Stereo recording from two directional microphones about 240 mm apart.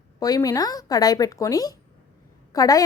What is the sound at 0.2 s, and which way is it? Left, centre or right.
A woman's voice, centre.